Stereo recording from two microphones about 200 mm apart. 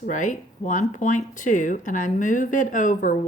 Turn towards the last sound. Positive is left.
turn(degrees=40)  # may be behind; listen again after turning